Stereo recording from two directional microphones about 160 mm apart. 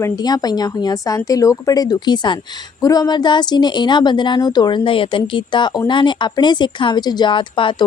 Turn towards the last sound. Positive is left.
turn(degrees=30)  # may be behind; listen again after turning